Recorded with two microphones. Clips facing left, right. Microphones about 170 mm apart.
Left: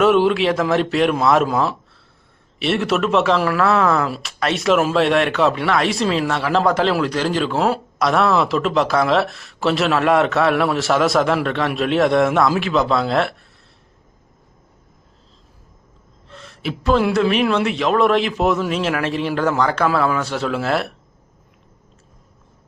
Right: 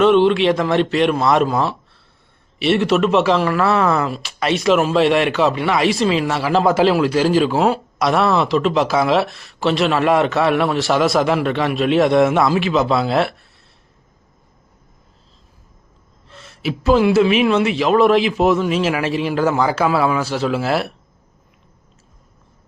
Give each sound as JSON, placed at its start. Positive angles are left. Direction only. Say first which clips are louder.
{"t": 0.0, "sound": "speech", "louder": "right 2 dB", "side_deg": 5}
{"t": 16.3, "sound": "speech", "louder": "right 3 dB", "side_deg": -5}